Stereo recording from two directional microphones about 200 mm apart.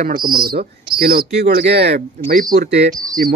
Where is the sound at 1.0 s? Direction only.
55° right (ahead or behind).